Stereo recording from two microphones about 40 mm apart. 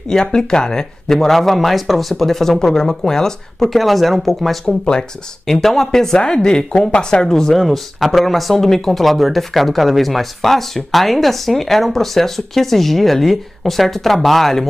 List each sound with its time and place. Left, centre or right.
0.1 s speech: centre
4.6 s speech: left
5.5 s speech: centre
7.5 s speech: centre